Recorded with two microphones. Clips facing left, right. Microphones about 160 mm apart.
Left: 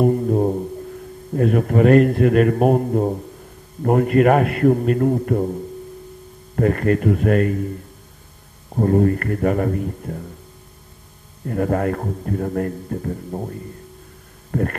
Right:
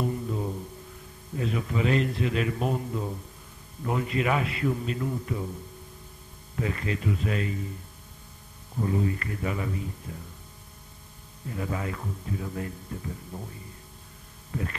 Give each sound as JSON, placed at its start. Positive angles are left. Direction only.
{"t": 0.0, "sound": "music", "side_deg": 55}
{"t": 1.3, "sound": "a man's voice", "side_deg": 55}
{"t": 8.7, "sound": "a man's voice", "side_deg": 55}
{"t": 11.4, "sound": "a man's voice", "side_deg": 55}
{"t": 14.5, "sound": "insect", "side_deg": 55}